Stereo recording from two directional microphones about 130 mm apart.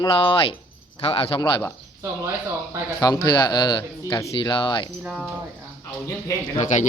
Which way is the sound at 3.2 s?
35° left (ahead or behind).